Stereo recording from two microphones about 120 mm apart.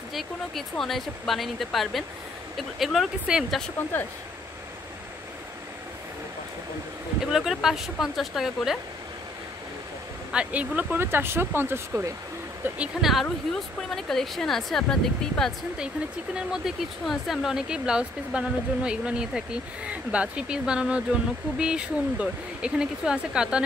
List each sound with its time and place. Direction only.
0.1 s speech: centre (ahead or behind)
7.2 s speech: 5° right (ahead or behind)
10.3 s speech: 10° right (ahead or behind)